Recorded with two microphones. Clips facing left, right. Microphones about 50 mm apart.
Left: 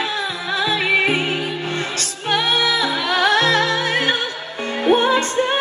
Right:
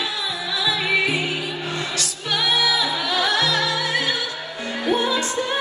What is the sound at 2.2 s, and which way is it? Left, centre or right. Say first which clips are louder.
Music: left 3 dB; left.